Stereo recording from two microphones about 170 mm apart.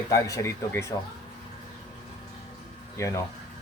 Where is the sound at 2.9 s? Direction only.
15° left (ahead or behind).